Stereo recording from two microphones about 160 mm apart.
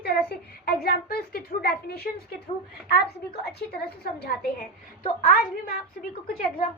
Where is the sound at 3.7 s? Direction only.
75° left (ahead or behind).